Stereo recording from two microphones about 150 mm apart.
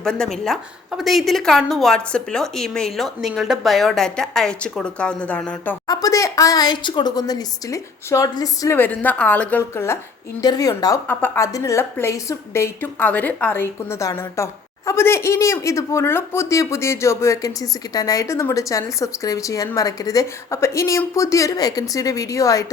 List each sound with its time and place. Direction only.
0.0 s a woman's voice: 5° left (ahead or behind)
5.9 s a woman's voice: 25° left (ahead or behind)
11.1 s a woman's voice: 15° left (ahead or behind)